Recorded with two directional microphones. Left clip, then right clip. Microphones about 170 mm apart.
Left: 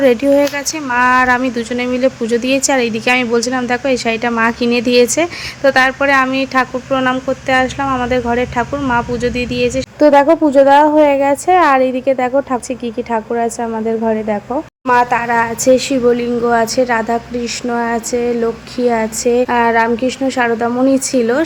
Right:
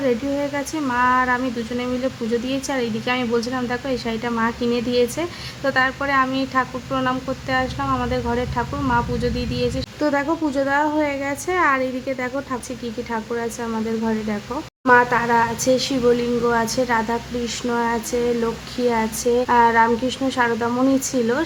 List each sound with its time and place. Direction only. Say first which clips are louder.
0.0 s a woman's voice: left 11 dB; 25° left (ahead or behind)